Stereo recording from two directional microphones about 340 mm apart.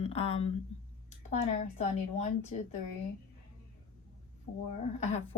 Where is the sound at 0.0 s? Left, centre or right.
Centre.